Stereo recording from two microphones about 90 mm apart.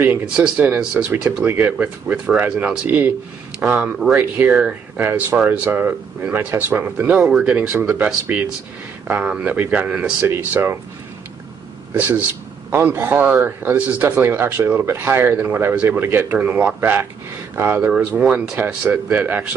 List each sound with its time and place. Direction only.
0.4 s speech: 20° right (ahead or behind)
7.2 s speech: 5° right (ahead or behind)
9.0 s speech: 15° right (ahead or behind)
10.2 s speech: 25° right (ahead or behind)
11.9 s speech: 20° right (ahead or behind)